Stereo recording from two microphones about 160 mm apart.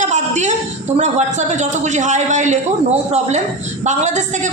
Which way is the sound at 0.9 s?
45° right (ahead or behind).